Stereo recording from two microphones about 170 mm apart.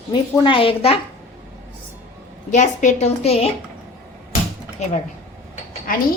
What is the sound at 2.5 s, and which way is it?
Speech, 45° left (ahead or behind).